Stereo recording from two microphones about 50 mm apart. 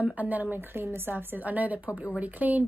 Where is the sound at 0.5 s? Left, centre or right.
Right.